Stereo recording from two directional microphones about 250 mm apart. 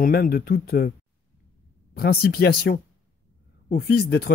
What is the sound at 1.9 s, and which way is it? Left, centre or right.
Speech, left.